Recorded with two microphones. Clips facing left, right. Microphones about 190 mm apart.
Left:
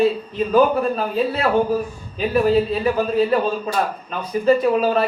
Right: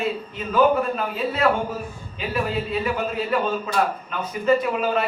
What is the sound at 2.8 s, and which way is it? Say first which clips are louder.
A man's voice: left 7 dB; 35° left (ahead or behind).